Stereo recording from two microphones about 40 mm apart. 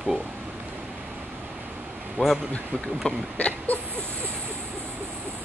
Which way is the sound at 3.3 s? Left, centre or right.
Left.